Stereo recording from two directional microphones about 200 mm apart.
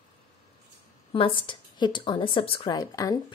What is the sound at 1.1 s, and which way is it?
Speech, 25° left (ahead or behind).